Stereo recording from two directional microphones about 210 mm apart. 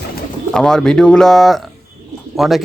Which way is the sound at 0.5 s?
5° left (ahead or behind).